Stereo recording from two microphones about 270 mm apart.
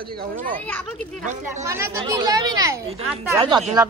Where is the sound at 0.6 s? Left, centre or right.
Centre.